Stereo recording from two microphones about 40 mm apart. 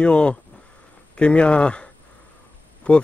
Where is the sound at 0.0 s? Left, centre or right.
Left.